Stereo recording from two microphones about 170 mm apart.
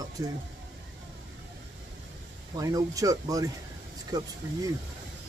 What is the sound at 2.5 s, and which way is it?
Speech, 20° right (ahead or behind).